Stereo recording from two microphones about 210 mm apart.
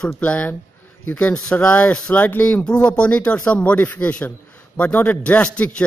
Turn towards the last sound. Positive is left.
turn(degrees=5)  # may be behind; listen again after turning